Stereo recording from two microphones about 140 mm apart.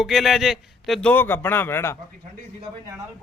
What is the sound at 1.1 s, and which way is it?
Speech, 15° left (ahead or behind).